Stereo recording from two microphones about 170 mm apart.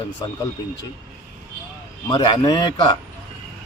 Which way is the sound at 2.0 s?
25° left (ahead or behind).